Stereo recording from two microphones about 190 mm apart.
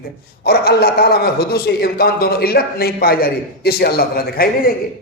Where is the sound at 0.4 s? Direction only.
55° left (ahead or behind).